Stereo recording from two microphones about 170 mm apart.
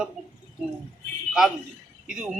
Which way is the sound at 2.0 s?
5° right (ahead or behind).